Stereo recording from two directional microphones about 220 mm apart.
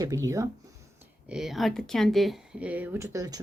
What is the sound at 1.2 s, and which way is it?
Speech, centre (ahead or behind).